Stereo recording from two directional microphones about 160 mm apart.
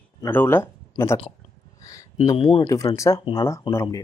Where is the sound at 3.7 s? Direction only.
30° left (ahead or behind).